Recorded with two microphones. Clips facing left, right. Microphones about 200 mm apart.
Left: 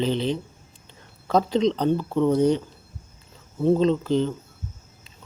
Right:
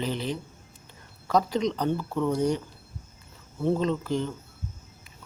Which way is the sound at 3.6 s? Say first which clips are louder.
Left 6 dB; 20° left (ahead or behind).